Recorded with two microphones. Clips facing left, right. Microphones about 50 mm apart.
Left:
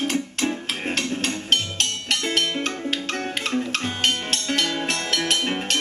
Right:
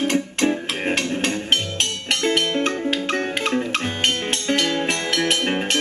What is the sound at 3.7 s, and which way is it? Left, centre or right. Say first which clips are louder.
Music: right 2 dB; centre.